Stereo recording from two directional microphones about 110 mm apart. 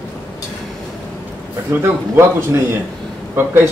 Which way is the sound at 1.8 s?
25° right (ahead or behind).